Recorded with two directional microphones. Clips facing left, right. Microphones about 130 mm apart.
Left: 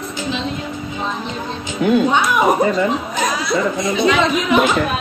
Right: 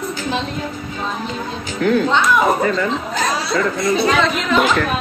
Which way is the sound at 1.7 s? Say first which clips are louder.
Left 1 dB; 15° left (ahead or behind).